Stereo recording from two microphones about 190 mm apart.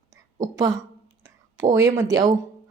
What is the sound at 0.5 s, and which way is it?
A woman's voice, 20° right (ahead or behind).